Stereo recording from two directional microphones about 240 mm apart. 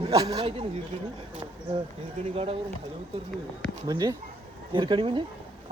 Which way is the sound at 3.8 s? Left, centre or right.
Centre.